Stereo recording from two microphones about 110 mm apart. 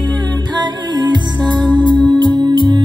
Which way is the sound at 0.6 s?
40° right (ahead or behind).